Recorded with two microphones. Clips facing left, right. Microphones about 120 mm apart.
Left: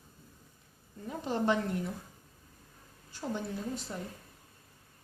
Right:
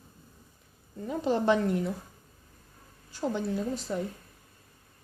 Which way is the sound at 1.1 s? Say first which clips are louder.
Right 5 dB; 90° right.